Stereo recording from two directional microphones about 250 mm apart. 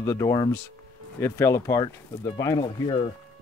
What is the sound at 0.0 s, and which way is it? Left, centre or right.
Speech, centre.